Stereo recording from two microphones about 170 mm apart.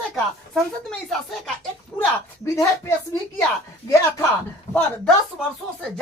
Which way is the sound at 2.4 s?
15° left (ahead or behind).